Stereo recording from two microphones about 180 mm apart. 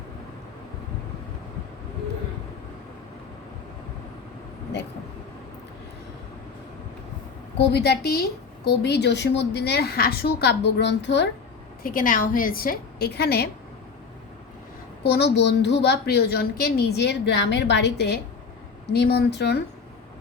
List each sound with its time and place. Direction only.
7.6 s a woman's voice: 65° left (ahead or behind)
11.8 s a woman's voice: 50° left (ahead or behind)
15.0 s a woman's voice: 65° left (ahead or behind)